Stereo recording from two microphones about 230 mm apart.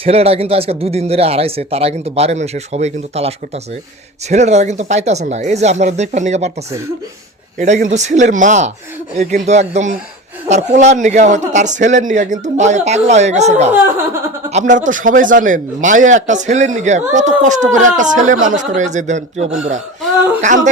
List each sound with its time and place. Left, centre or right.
0.0 s speech: right
7.6 s a man's voice: right